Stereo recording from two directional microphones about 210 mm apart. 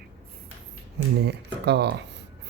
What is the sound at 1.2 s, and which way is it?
Speech, 50° right (ahead or behind).